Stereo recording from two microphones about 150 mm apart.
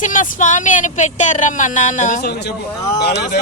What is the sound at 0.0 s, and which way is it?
Speech, 60° left (ahead or behind).